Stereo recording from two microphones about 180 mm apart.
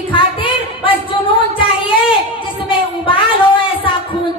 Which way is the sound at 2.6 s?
30° left (ahead or behind).